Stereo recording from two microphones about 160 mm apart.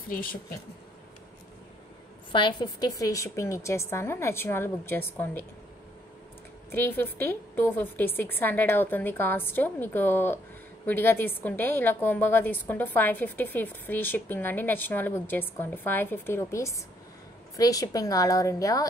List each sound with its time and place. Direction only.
0.1 s speech: 60° left (ahead or behind)
2.3 s a woman's voice: 30° left (ahead or behind); by 5.5 s 15° left (ahead or behind)
6.7 s a woman's voice: 15° left (ahead or behind)